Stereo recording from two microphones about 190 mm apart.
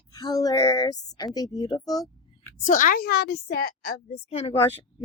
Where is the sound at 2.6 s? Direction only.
45° left (ahead or behind).